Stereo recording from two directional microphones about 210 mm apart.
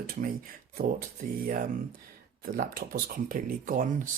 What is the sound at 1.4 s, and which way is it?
Speech, 40° right (ahead or behind).